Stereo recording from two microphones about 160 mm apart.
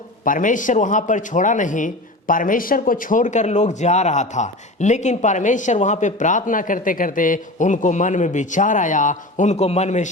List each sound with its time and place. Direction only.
0.3 s a man's voice: 55° left (ahead or behind)